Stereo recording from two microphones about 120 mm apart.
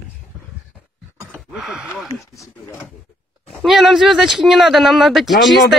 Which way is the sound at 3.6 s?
Centre (ahead or behind).